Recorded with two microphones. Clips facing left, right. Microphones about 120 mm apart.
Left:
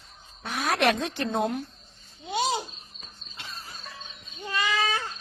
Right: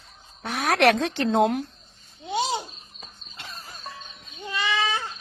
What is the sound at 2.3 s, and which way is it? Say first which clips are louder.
Speech: right 1 dB; 25° right (ahead or behind).